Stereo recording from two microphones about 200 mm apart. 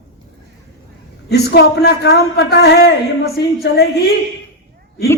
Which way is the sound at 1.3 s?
55° left (ahead or behind).